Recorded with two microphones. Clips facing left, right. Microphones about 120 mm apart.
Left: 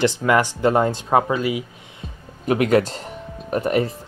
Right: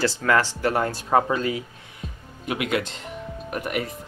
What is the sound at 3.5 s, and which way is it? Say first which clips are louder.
Speech: left 8 dB; 30° left (ahead or behind).